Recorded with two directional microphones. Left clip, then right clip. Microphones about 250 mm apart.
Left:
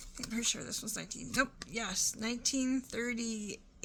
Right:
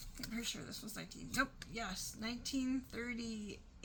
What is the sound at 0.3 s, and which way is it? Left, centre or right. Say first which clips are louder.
A woman's voice: left 8 dB; left.